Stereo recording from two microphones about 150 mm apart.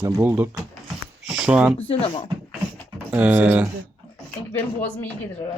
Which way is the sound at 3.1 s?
10° right (ahead or behind).